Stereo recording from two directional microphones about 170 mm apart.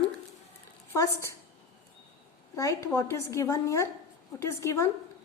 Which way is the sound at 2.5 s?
20° left (ahead or behind).